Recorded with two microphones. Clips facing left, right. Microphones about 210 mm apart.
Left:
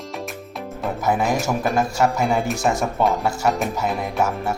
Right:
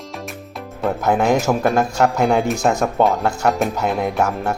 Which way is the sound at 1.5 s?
50° right (ahead or behind).